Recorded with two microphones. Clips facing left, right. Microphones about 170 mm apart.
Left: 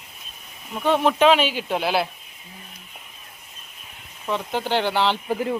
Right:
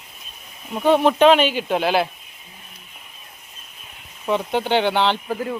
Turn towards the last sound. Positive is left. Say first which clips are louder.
# left 1 dB
turn(degrees=20)  # may be behind; listen again after turning